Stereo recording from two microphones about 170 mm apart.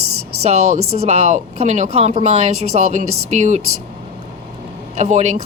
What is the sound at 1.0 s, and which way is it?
A woman's voice, 35° right (ahead or behind).